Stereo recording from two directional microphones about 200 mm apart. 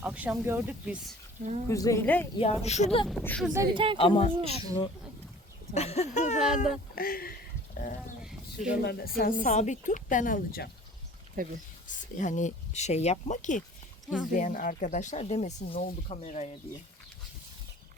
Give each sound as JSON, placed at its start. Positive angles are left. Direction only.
{"t": 0.0, "sound": "speech", "side_deg": -5}
{"t": 1.6, "sound": "a woman's voice", "side_deg": 15}
{"t": 2.4, "sound": "speech", "side_deg": 30}
{"t": 3.1, "sound": "speech", "side_deg": 5}
{"t": 3.5, "sound": "speech", "side_deg": -15}
{"t": 3.9, "sound": "speech", "side_deg": 30}
{"t": 5.7, "sound": "speech", "side_deg": 30}
{"t": 8.2, "sound": "a sound", "side_deg": -5}
{"t": 8.8, "sound": "speech", "side_deg": 55}
{"t": 11.4, "sound": "speech", "side_deg": -45}
{"t": 11.9, "sound": "speech", "side_deg": 40}